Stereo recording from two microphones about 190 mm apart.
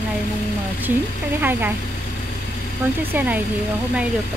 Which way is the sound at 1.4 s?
10° right (ahead or behind).